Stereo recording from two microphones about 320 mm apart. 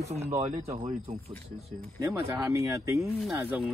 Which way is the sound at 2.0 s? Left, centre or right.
Centre.